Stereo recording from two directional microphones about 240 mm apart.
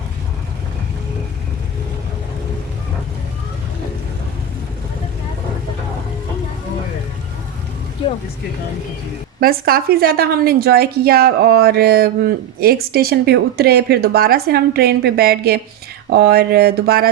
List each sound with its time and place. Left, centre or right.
9.4 s a woman's voice: right